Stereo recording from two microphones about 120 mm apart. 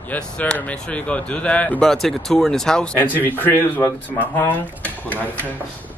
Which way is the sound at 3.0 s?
15° left (ahead or behind).